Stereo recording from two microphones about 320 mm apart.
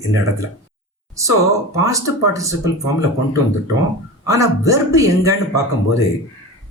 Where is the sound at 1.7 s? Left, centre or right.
Centre.